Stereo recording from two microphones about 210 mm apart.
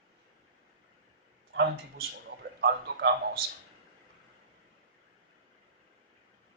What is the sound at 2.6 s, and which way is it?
Speech, 50° right (ahead or behind).